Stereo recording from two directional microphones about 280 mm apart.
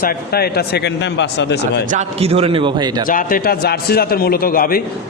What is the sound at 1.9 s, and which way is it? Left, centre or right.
A man's voice, right.